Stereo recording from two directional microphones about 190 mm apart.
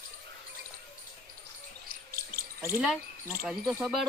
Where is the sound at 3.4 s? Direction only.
5° right (ahead or behind).